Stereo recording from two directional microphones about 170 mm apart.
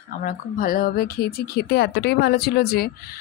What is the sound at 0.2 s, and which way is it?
Speech, 55° left (ahead or behind).